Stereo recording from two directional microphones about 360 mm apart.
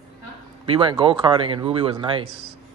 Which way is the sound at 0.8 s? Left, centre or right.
Centre.